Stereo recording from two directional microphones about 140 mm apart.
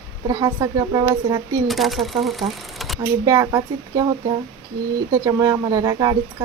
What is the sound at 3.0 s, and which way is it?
Speech, 25° right (ahead or behind).